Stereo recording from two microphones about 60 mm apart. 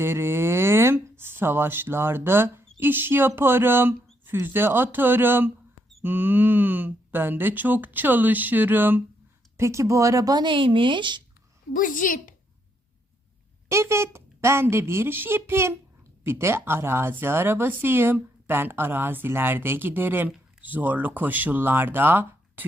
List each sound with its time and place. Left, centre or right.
0.0 s speech: right
9.6 s speech: right
13.7 s a woman's voice: right